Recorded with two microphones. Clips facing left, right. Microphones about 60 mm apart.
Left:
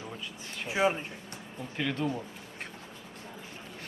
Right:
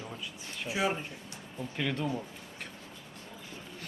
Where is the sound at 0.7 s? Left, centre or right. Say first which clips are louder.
Left 4 dB; left.